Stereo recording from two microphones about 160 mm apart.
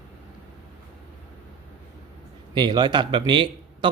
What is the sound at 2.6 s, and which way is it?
Speech, 30° right (ahead or behind).